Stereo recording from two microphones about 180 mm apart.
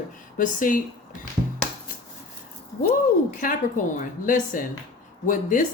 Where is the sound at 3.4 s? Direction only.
50° left (ahead or behind).